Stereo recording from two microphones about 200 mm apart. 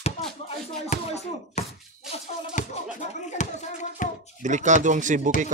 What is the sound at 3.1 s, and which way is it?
Hands, 35° left (ahead or behind).